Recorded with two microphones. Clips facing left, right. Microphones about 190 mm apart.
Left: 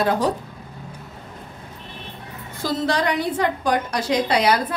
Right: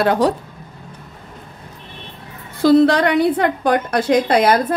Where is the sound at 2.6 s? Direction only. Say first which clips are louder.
Right 10 dB; 65° right (ahead or behind).